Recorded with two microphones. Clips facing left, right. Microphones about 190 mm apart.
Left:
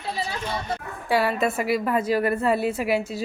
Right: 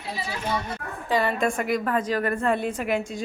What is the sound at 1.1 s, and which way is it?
A woman's voice, 5° left (ahead or behind).